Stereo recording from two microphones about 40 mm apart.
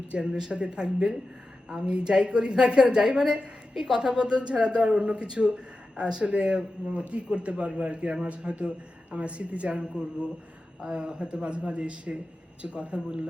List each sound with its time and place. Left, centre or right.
0.1 s a woman's voice: right
3.8 s a woman's voice: centre